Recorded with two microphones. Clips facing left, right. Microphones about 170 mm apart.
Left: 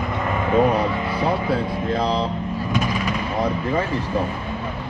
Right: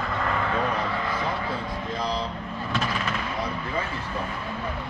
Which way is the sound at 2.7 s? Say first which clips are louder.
Left 4 dB; 15° left (ahead or behind).